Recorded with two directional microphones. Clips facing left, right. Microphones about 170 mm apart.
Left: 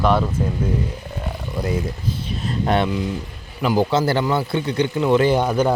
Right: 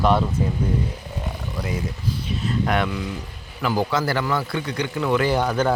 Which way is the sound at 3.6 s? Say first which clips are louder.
Left 4 dB; 20° left (ahead or behind).